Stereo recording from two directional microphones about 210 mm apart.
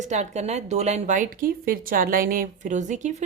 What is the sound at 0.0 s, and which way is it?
A woman's voice, 35° right (ahead or behind).